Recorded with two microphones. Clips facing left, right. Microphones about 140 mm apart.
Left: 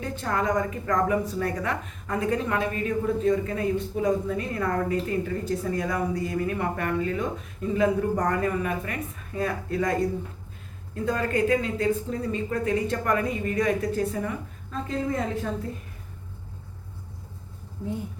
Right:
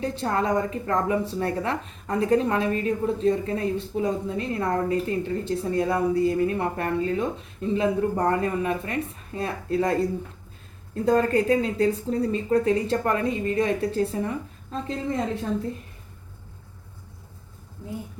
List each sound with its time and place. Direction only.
0.0 s a woman's voice: 30° right (ahead or behind)